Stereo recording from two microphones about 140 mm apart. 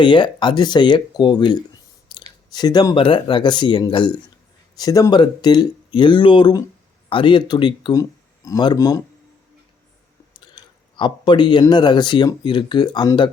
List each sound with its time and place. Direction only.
0.0 s speech: 35° left (ahead or behind)
10.4 s a sound: 35° left (ahead or behind)
11.7 s speech: 30° left (ahead or behind)